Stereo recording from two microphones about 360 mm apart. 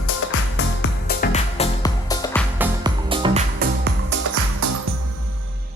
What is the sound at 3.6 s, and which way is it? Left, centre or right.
Music, right.